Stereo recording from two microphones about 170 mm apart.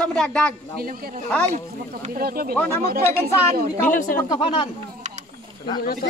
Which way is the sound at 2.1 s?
60° right (ahead or behind).